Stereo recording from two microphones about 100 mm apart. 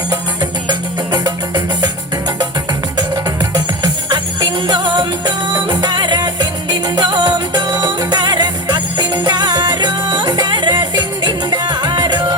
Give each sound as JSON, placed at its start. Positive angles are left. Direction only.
{"t": 0.7, "sound": "music", "side_deg": -45}
{"t": 3.0, "sound": "music", "side_deg": -40}